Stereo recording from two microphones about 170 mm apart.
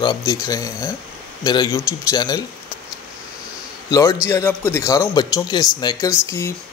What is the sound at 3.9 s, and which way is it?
A man's voice, 15° left (ahead or behind).